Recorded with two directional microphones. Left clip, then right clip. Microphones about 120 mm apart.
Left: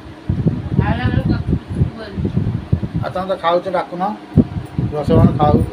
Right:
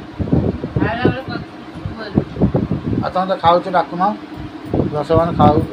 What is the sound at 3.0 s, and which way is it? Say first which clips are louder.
Speech: right 3 dB; 30° right (ahead or behind).